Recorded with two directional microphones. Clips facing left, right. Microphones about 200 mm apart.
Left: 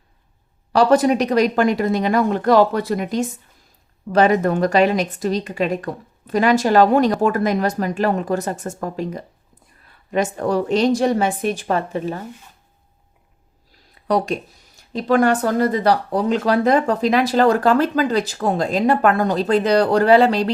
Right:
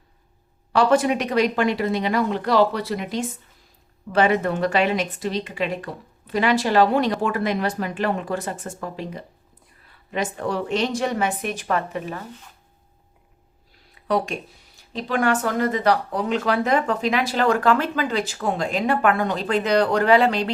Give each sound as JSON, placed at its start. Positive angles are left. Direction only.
{"t": 0.7, "sound": "speech", "side_deg": 40}
{"t": 14.9, "sound": "speech", "side_deg": 40}